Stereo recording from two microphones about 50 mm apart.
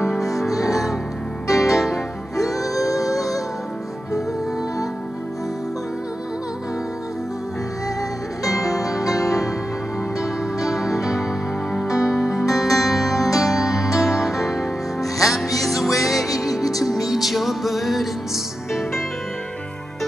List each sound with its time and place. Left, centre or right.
0.0 s music: centre
1.5 s music: left
1.8 s music: centre
8.5 s music: left
10.7 s music: centre